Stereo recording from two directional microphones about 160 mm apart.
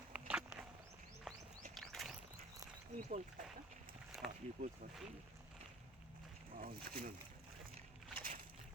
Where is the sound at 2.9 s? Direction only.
45° right (ahead or behind).